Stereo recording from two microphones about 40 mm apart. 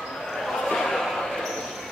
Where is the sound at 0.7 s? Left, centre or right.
Centre.